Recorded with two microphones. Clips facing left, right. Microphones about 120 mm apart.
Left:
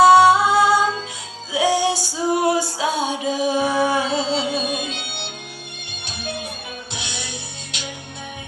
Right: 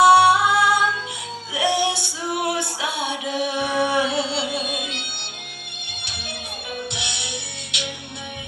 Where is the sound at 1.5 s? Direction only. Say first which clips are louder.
Left 3 dB; 35° left (ahead or behind).